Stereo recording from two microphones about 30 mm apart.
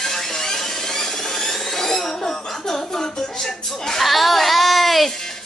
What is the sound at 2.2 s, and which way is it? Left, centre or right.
Speech, left.